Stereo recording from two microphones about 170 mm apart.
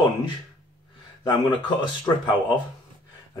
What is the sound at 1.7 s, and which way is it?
Speech, 25° left (ahead or behind).